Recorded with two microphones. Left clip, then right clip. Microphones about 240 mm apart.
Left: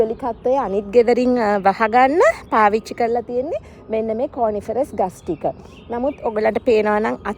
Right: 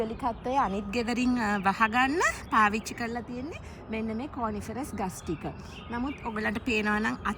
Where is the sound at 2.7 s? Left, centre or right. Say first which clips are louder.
Left 15 dB; centre.